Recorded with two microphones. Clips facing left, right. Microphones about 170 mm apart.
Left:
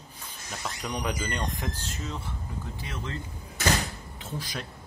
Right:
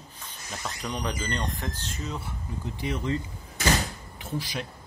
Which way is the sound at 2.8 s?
15° right (ahead or behind).